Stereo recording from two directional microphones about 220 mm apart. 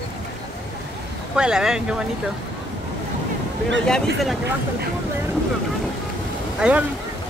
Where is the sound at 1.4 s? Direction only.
5° right (ahead or behind).